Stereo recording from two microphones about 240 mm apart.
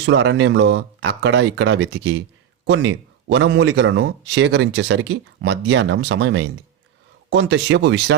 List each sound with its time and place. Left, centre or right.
0.0 s speech: right